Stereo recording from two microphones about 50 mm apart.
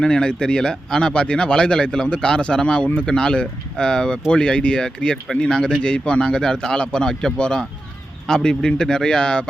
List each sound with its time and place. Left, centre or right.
0.0 s speech: centre